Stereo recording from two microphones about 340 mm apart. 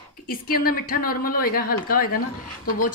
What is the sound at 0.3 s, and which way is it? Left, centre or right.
Speech, left.